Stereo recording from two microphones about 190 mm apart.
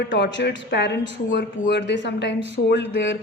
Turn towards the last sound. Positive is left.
turn(degrees=70)  # may be behind; listen again after turning